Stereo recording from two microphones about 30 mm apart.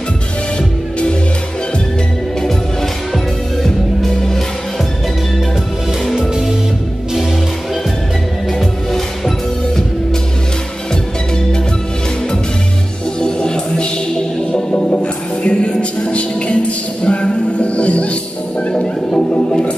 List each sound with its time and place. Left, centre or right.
8.5 s music: centre
13.2 s music: left
14.9 s music: left
18.7 s music: left